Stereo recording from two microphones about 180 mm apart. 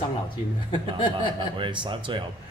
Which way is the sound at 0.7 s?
25° left (ahead or behind).